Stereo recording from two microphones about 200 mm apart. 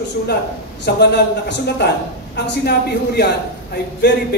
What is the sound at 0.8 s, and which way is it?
Speech, 55° left (ahead or behind).